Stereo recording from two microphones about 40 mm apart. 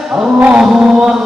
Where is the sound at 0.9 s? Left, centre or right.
Centre.